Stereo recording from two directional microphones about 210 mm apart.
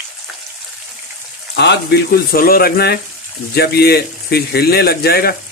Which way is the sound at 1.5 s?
55° left (ahead or behind).